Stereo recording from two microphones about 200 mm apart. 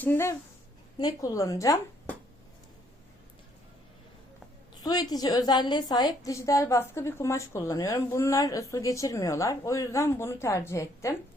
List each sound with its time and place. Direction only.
0.0 s a woman's voice: 10° left (ahead or behind)
4.8 s a woman's voice: 20° left (ahead or behind)